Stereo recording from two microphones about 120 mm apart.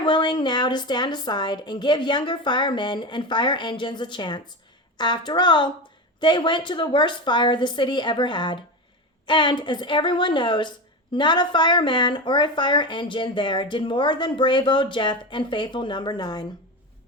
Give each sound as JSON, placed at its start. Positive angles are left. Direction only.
{"t": 0.0, "sound": "speech", "side_deg": 40}